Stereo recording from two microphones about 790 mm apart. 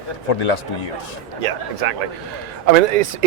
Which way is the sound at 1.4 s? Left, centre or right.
Right.